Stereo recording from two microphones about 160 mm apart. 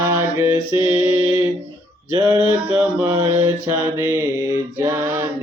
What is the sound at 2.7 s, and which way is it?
Mantra, 25° right (ahead or behind).